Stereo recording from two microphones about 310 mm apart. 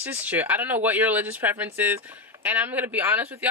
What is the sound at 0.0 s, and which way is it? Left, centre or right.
Speech, centre.